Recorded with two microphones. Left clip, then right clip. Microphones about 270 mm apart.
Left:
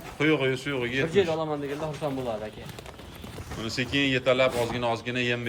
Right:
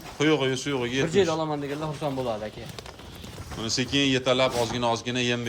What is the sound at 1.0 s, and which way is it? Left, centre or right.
A man's voice, right.